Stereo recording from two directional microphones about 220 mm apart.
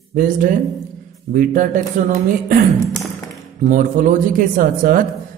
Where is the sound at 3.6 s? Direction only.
35° right (ahead or behind).